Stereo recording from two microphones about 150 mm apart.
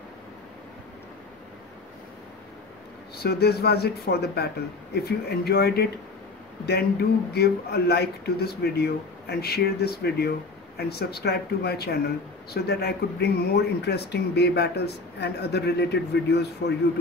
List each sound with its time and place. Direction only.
3.2 s speech: 90° left